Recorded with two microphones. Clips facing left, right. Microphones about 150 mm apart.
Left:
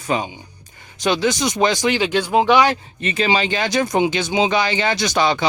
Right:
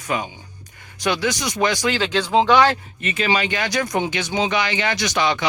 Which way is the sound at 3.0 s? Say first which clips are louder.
Left 2 dB; 35° left (ahead or behind).